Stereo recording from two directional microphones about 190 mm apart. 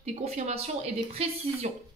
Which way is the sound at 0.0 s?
35° right (ahead or behind).